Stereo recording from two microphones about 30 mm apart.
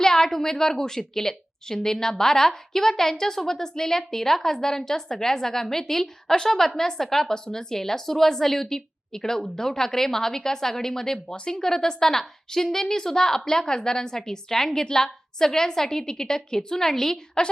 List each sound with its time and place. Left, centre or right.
0.0 s a woman's voice: centre
17.4 s a woman's voice: left